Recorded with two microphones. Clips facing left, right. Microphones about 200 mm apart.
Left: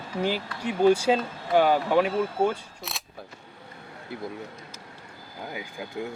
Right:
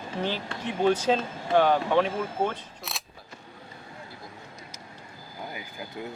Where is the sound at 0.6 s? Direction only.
10° left (ahead or behind).